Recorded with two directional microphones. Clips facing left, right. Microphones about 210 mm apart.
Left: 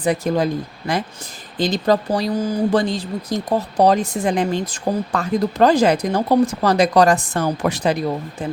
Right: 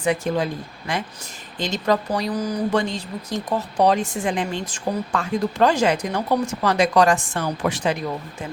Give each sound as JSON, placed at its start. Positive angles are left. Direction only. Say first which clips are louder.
{"t": 0.0, "sound": "speech", "louder": "left 3 dB", "side_deg": 40}